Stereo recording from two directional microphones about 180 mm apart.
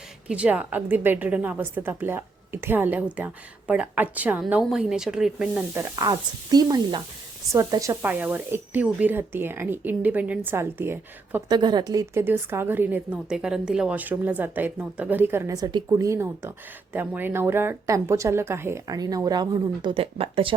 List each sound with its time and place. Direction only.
0.3 s a woman's voice: 5° right (ahead or behind)
6.0 s a woman's voice: 20° right (ahead or behind)
11.4 s a woman's voice: 25° right (ahead or behind)